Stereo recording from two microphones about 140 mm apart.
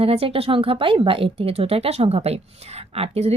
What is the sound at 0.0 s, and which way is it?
Speech, 45° right (ahead or behind).